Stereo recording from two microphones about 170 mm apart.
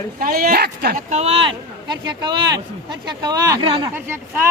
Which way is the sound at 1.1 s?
40° right (ahead or behind).